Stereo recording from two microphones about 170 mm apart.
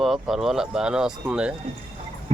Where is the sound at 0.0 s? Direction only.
Centre (ahead or behind).